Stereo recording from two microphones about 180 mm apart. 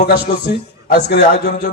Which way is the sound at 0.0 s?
55° left (ahead or behind).